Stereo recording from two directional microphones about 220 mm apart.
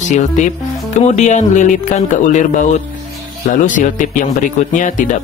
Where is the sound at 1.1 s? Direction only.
35° left (ahead or behind).